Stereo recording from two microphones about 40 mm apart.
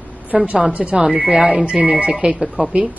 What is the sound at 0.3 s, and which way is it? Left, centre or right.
Speech, right.